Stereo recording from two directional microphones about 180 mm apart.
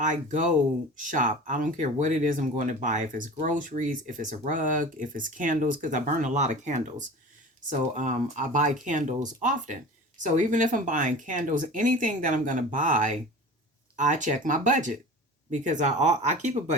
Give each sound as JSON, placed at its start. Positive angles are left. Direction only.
{"t": 0.0, "sound": "speech", "side_deg": -45}